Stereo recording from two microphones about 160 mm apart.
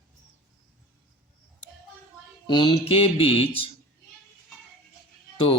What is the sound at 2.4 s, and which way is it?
Speech, 30° left (ahead or behind).